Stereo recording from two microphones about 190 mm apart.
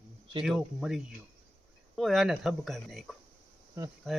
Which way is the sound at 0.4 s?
5° right (ahead or behind).